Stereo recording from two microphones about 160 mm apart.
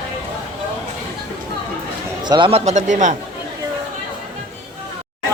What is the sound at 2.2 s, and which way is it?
Speech, 30° right (ahead or behind).